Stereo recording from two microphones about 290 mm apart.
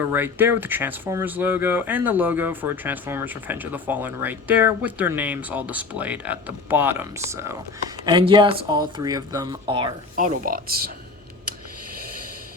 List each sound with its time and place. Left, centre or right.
0.0 s speech: centre; by 10.9 s right